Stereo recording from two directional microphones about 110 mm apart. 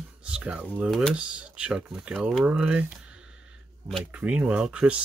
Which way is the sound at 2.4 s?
10° right (ahead or behind).